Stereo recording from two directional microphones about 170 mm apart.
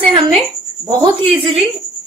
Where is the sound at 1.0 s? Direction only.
30° right (ahead or behind).